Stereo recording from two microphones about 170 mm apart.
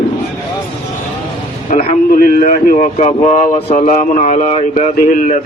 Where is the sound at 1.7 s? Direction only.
55° left (ahead or behind); by 4.9 s 40° left (ahead or behind).